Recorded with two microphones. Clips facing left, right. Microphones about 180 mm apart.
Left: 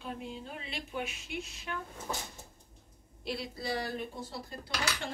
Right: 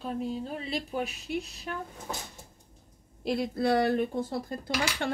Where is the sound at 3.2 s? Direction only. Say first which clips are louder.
Right 10 dB; 50° right (ahead or behind).